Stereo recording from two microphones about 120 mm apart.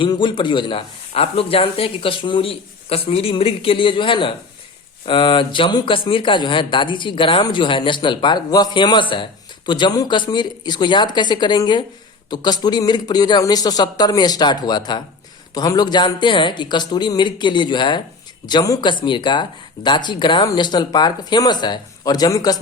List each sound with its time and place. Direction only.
0.0 s a man's voice: 40° left (ahead or behind)